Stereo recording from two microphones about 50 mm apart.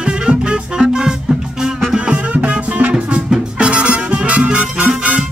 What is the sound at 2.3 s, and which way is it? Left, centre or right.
Music, right.